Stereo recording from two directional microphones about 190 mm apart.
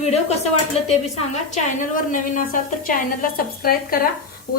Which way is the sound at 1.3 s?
40° left (ahead or behind).